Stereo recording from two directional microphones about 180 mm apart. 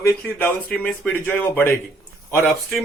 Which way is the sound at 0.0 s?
10° left (ahead or behind).